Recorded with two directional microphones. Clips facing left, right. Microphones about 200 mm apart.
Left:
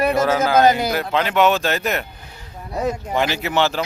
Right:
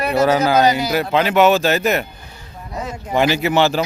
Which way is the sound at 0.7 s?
55° left (ahead or behind).